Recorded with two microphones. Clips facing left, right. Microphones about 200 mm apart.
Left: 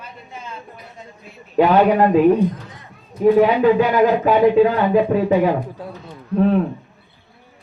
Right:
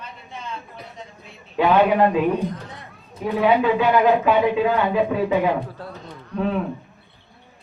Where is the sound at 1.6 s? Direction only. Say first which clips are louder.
Left 3 dB; 40° left (ahead or behind).